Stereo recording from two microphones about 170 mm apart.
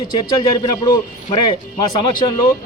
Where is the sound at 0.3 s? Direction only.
25° left (ahead or behind).